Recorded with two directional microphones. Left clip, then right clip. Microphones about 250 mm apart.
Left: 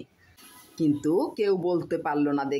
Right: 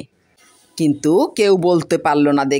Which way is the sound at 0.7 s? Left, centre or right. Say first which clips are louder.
Right 9 dB; right.